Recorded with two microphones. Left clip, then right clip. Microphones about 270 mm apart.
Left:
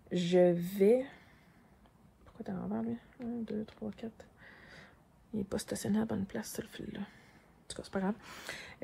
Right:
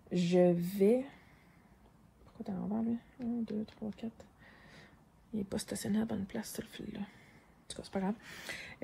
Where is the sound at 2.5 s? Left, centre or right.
Left.